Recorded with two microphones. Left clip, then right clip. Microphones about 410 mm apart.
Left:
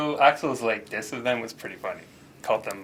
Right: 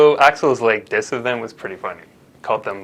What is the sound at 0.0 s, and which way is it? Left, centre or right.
Speech, right.